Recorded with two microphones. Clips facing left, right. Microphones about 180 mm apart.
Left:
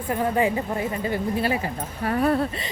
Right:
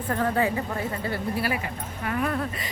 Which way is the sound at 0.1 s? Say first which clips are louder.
Left 2 dB; 15° left (ahead or behind).